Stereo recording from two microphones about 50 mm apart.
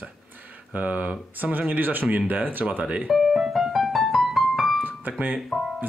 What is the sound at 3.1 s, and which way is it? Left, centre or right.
Piano, centre.